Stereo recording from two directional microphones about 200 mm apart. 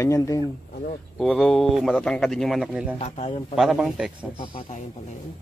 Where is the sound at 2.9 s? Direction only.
30° left (ahead or behind).